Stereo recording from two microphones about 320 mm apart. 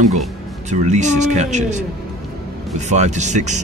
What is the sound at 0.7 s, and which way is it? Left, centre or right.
Speech, right.